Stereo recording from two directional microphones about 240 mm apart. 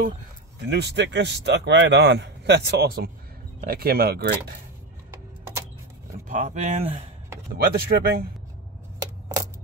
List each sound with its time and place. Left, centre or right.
0.6 s speech: right
6.2 s speech: right
7.5 s speech: right